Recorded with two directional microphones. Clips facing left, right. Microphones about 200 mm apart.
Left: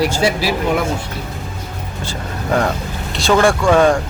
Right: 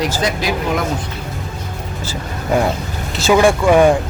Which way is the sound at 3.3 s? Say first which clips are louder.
Right 1 dB; 15° right (ahead or behind).